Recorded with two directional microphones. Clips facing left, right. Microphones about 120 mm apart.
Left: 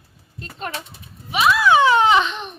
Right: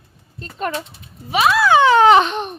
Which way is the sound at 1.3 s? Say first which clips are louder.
Right 2 dB; 40° right (ahead or behind).